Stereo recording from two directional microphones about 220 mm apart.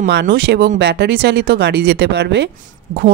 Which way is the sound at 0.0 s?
50° right (ahead or behind).